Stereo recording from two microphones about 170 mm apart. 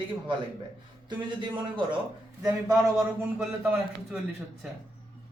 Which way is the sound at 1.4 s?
30° right (ahead or behind).